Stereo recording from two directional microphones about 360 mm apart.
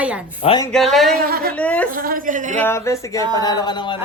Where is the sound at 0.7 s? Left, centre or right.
Centre.